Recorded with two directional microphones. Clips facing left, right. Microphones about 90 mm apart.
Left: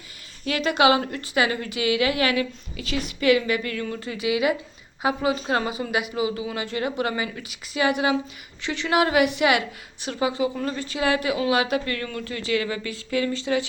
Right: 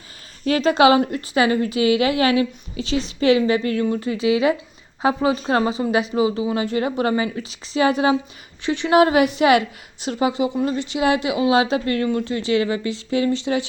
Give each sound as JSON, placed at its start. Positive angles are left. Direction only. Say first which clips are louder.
{"t": 0.4, "sound": "a woman's voice", "louder": "right 5 dB", "side_deg": -35}